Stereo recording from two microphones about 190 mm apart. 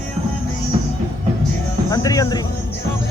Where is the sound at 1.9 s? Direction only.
20° left (ahead or behind).